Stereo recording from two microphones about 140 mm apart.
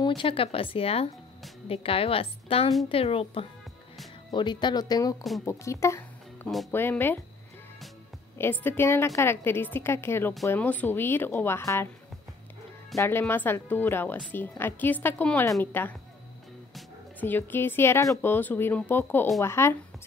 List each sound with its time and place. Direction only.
0.0 s a woman's voice: 35° left (ahead or behind)
4.3 s a woman's voice: 35° left (ahead or behind)
6.4 s speech: centre (ahead or behind)
6.7 s speech: 15° left (ahead or behind)
8.4 s speech: 15° left (ahead or behind)
12.9 s speech: 15° left (ahead or behind)
17.2 s a woman's voice: 15° left (ahead or behind)